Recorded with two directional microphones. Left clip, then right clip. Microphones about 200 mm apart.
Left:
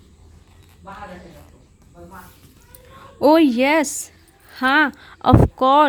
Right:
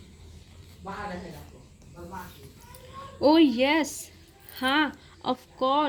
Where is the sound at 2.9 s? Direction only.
35° left (ahead or behind).